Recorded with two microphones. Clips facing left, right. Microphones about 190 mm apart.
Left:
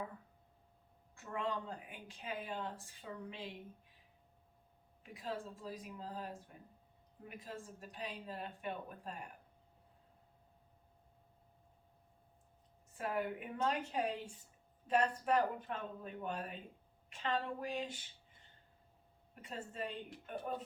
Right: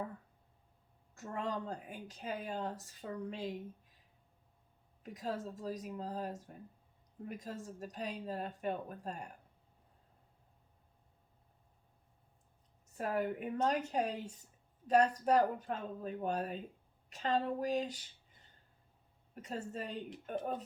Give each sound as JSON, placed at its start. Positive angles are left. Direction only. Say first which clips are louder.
{"t": 1.1, "sound": "speech", "louder": "right 1 dB", "side_deg": -40}
{"t": 5.0, "sound": "speech", "louder": "right 4 dB", "side_deg": -40}
{"t": 13.0, "sound": "speech", "louder": "right 3 dB", "side_deg": -40}
{"t": 19.3, "sound": "speech", "louder": "right 6 dB", "side_deg": -40}